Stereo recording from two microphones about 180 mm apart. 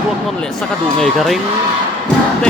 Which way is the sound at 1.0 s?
Centre (ahead or behind).